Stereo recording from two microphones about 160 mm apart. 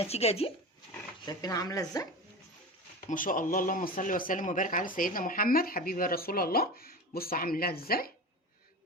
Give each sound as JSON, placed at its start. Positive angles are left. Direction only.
{"t": 0.0, "sound": "speech", "side_deg": 40}
{"t": 1.2, "sound": "speech", "side_deg": 25}
{"t": 3.1, "sound": "speech", "side_deg": 55}